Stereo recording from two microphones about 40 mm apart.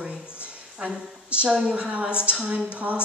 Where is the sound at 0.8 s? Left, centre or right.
Right.